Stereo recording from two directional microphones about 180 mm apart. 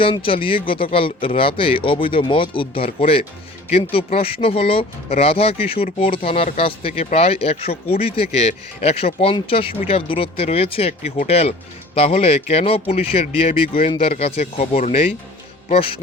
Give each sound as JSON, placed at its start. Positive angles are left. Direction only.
{"t": 0.0, "sound": "speech", "side_deg": 30}